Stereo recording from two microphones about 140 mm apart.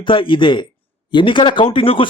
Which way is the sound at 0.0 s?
40° left (ahead or behind).